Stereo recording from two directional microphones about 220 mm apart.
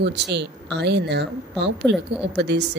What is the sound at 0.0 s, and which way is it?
A woman's voice, 50° right (ahead or behind).